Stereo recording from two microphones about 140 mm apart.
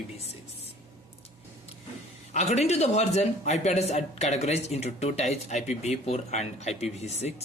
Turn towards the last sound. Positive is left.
turn(degrees=50)  # may be behind; listen again after turning